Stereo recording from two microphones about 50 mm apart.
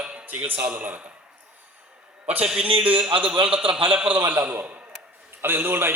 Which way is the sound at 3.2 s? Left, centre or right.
Right.